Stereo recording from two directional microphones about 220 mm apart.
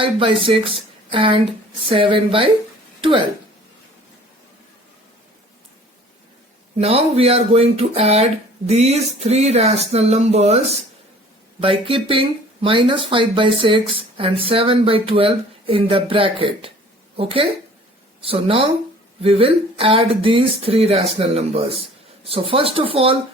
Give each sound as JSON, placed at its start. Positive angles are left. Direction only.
{"t": 0.0, "sound": "speech", "side_deg": -25}
{"t": 6.7, "sound": "speech", "side_deg": -25}